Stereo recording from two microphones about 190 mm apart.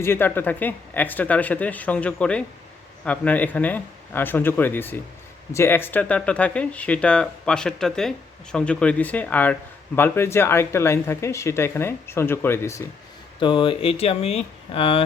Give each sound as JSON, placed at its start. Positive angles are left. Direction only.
{"t": 0.0, "sound": "speech", "side_deg": 10}
{"t": 13.4, "sound": "speech", "side_deg": 25}